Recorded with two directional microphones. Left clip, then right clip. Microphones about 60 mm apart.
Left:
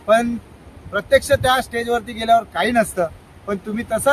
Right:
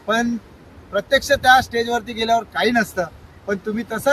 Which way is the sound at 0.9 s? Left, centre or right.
Centre.